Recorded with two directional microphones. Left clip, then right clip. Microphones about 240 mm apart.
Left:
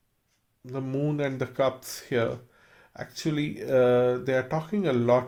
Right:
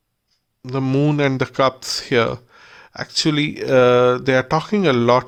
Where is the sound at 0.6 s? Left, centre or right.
Right.